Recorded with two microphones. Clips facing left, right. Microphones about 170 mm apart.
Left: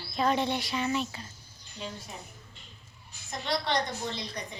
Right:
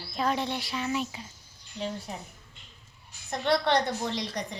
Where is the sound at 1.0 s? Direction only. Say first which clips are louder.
Right 1 dB; 10° right (ahead or behind).